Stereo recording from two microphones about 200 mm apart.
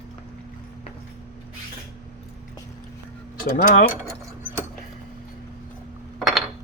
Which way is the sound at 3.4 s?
45° left (ahead or behind).